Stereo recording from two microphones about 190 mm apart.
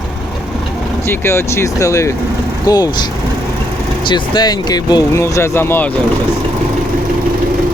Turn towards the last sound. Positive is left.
turn(degrees=10)  # may be behind; listen again after turning